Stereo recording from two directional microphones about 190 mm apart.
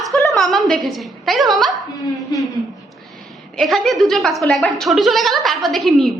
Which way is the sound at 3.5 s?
Centre (ahead or behind).